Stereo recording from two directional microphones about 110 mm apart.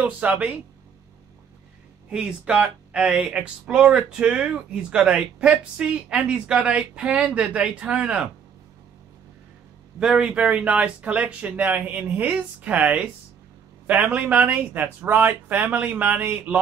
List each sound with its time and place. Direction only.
0.0 s speech: 15° right (ahead or behind)
2.0 s speech: 10° right (ahead or behind)
9.9 s speech: 10° right (ahead or behind)